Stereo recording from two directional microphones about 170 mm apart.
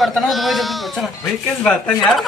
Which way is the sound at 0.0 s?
Centre (ahead or behind).